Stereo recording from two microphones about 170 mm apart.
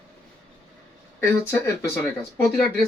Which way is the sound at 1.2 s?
15° left (ahead or behind).